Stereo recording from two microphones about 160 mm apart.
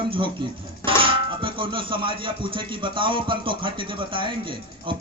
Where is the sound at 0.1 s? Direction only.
30° right (ahead or behind).